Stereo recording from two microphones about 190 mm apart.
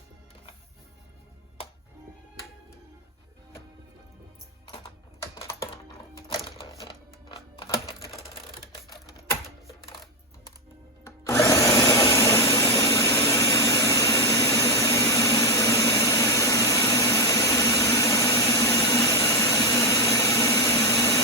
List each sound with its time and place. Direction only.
5.4 s typing: 15° left (ahead or behind)
6.2 s typing: 25° left (ahead or behind)
11.0 s a sound: 15° left (ahead or behind)